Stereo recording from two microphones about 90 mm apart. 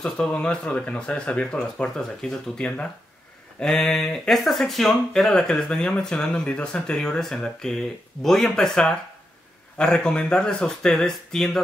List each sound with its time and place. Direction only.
0.0 s speech: 10° left (ahead or behind)